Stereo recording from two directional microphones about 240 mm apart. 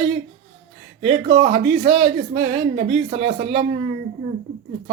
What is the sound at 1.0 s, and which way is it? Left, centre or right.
Speech, right.